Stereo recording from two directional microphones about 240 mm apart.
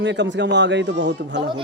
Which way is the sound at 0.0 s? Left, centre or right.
Right.